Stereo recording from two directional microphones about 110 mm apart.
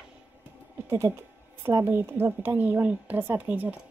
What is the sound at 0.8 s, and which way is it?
A woman's voice, 25° right (ahead or behind).